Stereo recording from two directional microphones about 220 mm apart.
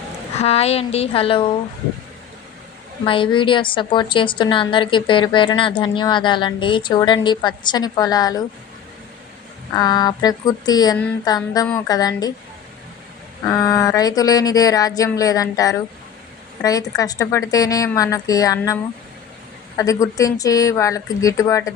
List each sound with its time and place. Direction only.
0.3 s a woman's voice: 30° left (ahead or behind)
3.0 s a woman's voice: 25° left (ahead or behind)
9.7 s speech: 20° left (ahead or behind)
13.4 s speech: 15° left (ahead or behind)
17.0 s speech: 15° left (ahead or behind)